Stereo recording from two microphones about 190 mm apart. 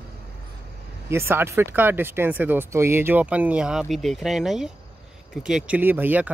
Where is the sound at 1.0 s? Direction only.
15° right (ahead or behind).